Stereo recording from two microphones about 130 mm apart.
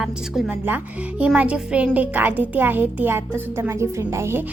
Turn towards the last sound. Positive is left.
turn(degrees=-20)  # may be behind; listen again after turning